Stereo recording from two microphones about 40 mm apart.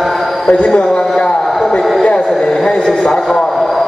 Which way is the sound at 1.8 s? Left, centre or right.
Centre.